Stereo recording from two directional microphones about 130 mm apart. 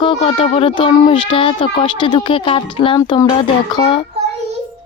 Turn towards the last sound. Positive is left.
turn(degrees=45)  # may be behind; listen again after turning